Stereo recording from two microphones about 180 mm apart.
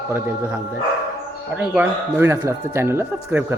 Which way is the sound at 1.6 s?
5° right (ahead or behind).